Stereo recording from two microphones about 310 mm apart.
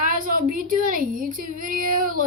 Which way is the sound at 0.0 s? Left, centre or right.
Right.